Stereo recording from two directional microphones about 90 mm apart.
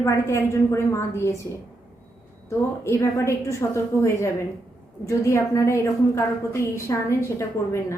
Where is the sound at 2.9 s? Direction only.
30° left (ahead or behind).